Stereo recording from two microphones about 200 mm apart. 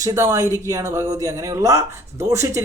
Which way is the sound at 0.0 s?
15° right (ahead or behind).